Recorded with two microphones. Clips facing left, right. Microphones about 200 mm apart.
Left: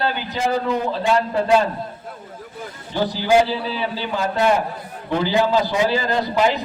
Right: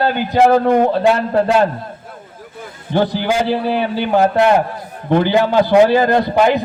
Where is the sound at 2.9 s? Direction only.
60° right (ahead or behind).